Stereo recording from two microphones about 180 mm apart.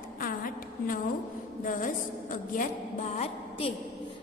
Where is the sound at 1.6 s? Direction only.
45° left (ahead or behind).